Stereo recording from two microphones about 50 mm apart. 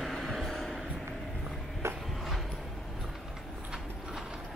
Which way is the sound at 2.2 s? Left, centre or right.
Centre.